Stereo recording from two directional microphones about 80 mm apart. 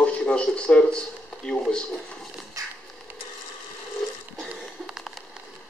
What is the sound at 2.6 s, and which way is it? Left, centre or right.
Typewriter, right.